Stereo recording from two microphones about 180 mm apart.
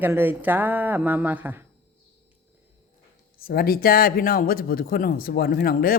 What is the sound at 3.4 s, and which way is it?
A man's voice, 55° left (ahead or behind).